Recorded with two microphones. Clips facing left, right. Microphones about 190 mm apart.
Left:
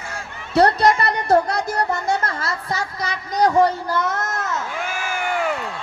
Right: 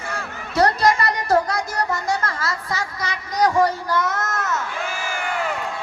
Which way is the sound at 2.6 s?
55° left (ahead or behind).